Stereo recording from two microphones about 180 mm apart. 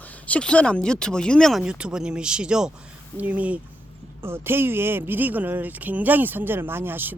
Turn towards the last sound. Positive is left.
turn(degrees=-10)  # may be behind; listen again after turning